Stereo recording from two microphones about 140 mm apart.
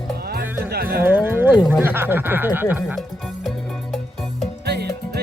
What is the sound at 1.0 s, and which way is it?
Music, 15° right (ahead or behind).